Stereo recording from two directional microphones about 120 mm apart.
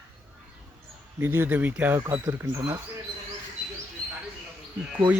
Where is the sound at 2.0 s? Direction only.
30° right (ahead or behind).